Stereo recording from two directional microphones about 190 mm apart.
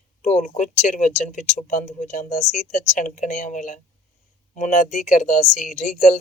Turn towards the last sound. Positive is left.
turn(degrees=45)  # may be behind; listen again after turning